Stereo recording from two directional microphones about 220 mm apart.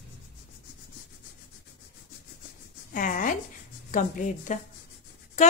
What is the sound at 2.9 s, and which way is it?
Speech, 40° left (ahead or behind).